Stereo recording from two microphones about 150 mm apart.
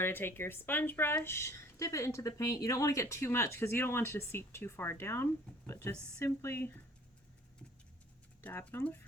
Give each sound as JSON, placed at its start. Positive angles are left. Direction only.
{"t": 0.0, "sound": "speech", "side_deg": 15}
{"t": 8.4, "sound": "speech", "side_deg": 15}